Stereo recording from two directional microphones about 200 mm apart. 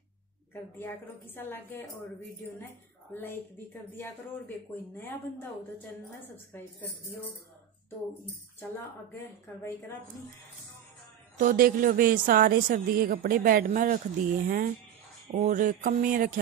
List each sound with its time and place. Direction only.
0.7 s a woman's voice: 10° left (ahead or behind)
3.1 s a woman's voice: 10° left (ahead or behind)
9.2 s a woman's voice: 10° left (ahead or behind)
11.3 s a woman's voice: 45° right (ahead or behind)
15.3 s a sound: 40° right (ahead or behind)